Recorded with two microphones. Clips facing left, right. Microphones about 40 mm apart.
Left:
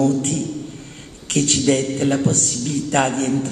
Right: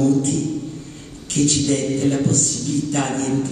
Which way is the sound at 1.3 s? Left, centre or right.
Left.